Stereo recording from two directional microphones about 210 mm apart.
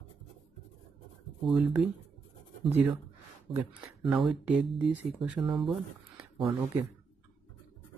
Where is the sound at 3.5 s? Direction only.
25° right (ahead or behind).